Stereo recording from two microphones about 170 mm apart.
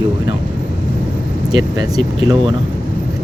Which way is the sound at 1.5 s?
25° right (ahead or behind).